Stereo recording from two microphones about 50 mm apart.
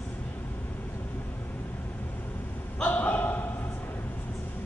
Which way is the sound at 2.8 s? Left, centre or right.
Left.